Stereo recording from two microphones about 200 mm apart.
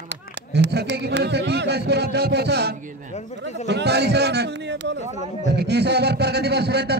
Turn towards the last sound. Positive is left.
turn(degrees=-55)  # may be behind; listen again after turning